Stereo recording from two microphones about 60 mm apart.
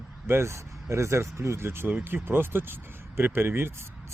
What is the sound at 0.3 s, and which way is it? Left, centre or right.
Speech, right.